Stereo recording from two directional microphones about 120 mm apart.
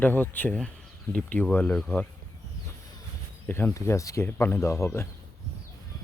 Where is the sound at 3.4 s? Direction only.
20° left (ahead or behind).